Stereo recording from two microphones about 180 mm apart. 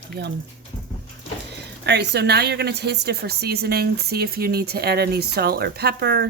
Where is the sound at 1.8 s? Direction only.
70° right (ahead or behind).